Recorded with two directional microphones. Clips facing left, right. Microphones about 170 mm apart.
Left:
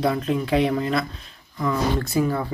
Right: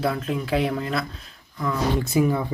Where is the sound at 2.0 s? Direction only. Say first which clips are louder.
Right 1 dB; 15° right (ahead or behind).